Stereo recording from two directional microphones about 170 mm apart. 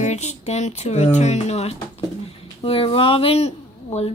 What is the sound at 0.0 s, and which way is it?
Speech, 45° left (ahead or behind).